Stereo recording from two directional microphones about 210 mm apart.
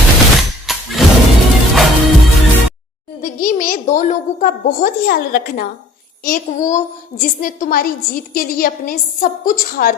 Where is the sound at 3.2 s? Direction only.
40° left (ahead or behind).